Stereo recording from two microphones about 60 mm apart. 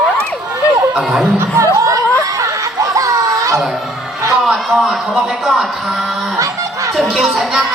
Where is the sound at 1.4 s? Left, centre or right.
Right.